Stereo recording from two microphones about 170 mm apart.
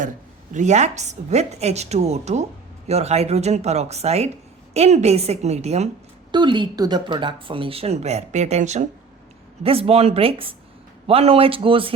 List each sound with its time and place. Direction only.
0.5 s a woman's voice: 45° right (ahead or behind)
6.3 s a woman's voice: 25° right (ahead or behind)